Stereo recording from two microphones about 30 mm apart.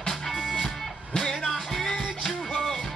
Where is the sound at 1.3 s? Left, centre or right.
Centre.